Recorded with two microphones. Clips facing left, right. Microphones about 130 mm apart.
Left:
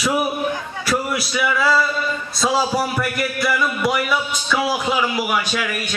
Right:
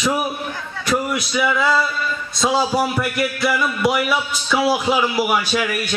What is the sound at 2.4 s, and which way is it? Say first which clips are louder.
A man's voice: right 1 dB; centre (ahead or behind).